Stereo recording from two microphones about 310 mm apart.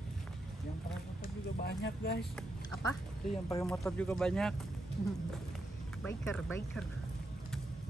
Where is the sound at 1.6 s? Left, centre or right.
Left.